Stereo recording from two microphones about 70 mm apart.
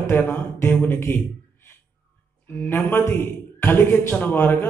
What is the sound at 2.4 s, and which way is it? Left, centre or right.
A man's voice, left.